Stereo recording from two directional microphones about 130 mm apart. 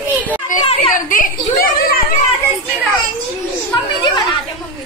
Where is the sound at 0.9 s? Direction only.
90° left.